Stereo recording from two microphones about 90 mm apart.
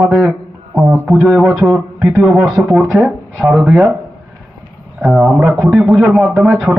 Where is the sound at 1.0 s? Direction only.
Centre (ahead or behind).